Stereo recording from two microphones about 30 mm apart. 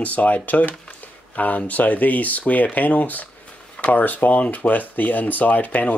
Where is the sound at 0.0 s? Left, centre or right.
Left.